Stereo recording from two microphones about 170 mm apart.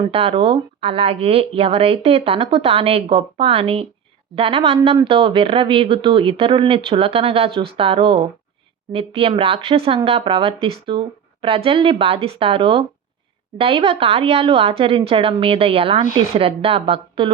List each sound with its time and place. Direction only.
0.1 s speech: 35° right (ahead or behind)